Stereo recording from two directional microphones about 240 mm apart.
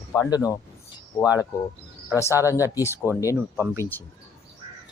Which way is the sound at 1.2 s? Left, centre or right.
Centre.